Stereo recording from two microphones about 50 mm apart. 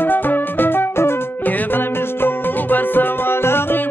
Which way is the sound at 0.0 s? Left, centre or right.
Left.